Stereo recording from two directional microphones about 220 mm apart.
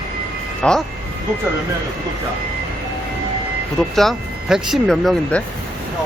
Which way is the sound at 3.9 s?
Centre (ahead or behind).